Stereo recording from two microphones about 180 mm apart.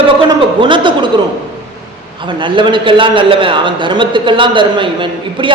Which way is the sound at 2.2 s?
25° right (ahead or behind).